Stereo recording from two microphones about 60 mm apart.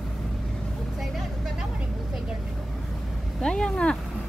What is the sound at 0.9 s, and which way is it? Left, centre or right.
Vehicle, centre.